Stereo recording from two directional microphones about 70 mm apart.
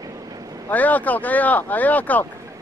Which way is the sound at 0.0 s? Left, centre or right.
Right.